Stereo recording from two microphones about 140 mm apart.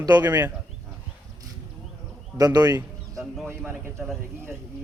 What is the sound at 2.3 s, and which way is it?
Speech, 25° right (ahead or behind).